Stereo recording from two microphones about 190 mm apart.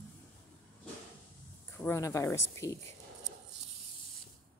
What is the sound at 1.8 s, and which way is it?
Speech, 15° left (ahead or behind).